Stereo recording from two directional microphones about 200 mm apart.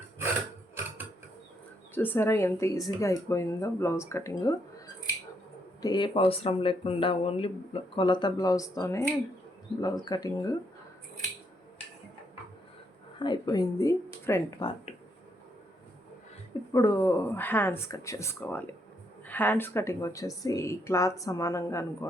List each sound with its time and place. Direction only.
2.0 s speech: 10° left (ahead or behind)
5.8 s speech: 20° left (ahead or behind)
13.1 s speech: 20° left (ahead or behind)
16.7 s speech: 15° left (ahead or behind)